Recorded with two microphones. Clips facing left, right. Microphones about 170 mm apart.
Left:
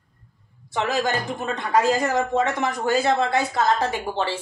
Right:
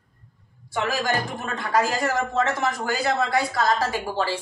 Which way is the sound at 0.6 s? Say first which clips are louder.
Left 2 dB; 20° left (ahead or behind).